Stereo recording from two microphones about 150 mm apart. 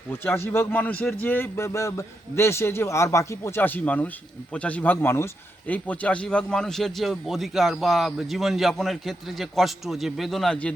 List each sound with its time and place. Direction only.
0.1 s a man's voice: 15° left (ahead or behind)